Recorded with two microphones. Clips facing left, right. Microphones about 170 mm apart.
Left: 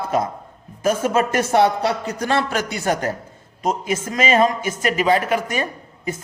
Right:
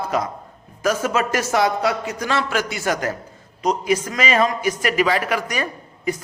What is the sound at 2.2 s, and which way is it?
Speech, 55° left (ahead or behind).